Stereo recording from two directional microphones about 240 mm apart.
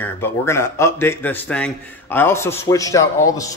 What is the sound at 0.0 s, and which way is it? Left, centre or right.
A man's voice, centre.